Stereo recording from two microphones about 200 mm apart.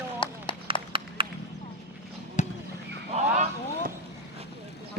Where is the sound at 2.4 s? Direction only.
35° left (ahead or behind).